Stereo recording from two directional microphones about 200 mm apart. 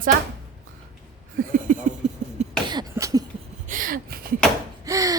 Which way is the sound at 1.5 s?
40° right (ahead or behind).